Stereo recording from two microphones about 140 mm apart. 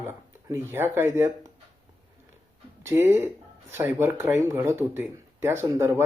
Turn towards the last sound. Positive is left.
turn(degrees=-15)  # may be behind; listen again after turning